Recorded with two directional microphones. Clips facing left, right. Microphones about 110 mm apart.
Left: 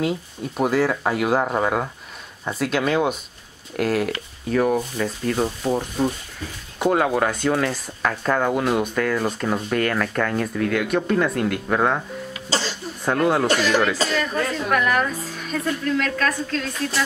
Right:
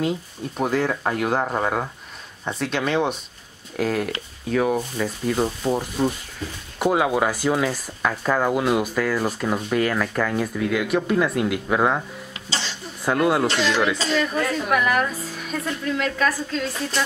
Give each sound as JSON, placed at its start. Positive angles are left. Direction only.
{"t": 0.6, "sound": "speech", "side_deg": 5}
{"t": 12.4, "sound": "speech", "side_deg": 40}
{"t": 13.0, "sound": "speech", "side_deg": -5}